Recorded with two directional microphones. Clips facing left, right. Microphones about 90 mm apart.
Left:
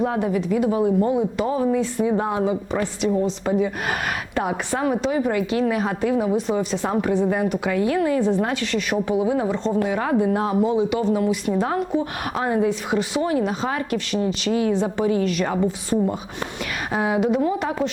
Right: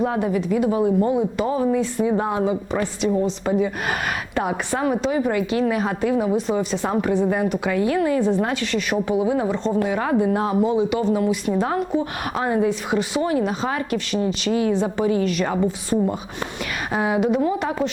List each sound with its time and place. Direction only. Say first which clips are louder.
0.0 s a woman's voice: even; 25° right (ahead or behind)